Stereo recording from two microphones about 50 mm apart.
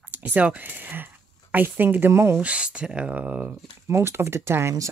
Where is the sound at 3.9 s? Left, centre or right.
Right.